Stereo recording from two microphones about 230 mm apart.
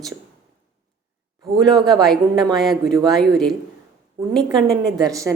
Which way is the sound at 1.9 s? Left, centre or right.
Centre.